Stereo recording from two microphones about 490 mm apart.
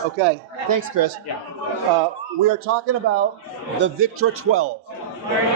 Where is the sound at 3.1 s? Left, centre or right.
Right.